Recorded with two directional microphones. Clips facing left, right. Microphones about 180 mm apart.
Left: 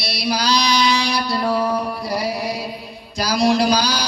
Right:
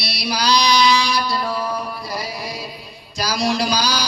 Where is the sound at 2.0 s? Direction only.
70° left (ahead or behind).